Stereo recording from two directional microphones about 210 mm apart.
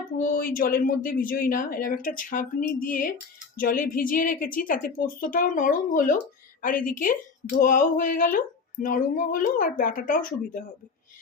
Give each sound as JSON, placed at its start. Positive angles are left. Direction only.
{"t": 0.2, "sound": "speech", "side_deg": 40}